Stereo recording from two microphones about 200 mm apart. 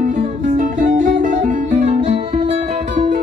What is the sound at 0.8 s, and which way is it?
Music, 40° right (ahead or behind).